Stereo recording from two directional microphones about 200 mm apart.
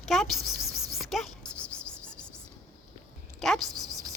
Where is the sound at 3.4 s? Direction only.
Centre (ahead or behind).